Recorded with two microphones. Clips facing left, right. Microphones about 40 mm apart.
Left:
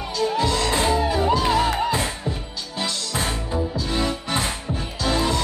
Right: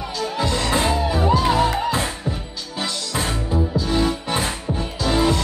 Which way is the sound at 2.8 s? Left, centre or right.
Centre.